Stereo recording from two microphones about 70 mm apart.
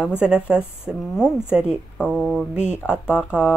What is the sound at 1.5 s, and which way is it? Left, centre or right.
Speech, centre.